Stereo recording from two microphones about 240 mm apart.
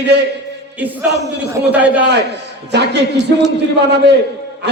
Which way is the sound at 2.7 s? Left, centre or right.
Right.